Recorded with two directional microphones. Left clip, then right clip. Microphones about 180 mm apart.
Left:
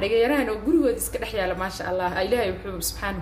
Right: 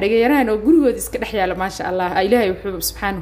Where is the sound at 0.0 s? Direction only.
45° right (ahead or behind).